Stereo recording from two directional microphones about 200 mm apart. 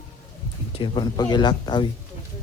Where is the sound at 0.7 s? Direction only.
25° left (ahead or behind).